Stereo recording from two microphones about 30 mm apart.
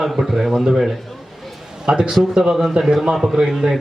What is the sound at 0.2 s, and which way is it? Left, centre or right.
Speech, centre.